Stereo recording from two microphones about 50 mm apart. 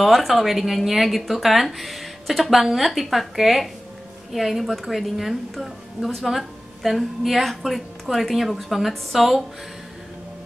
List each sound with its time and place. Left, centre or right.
0.0 s a woman's voice: centre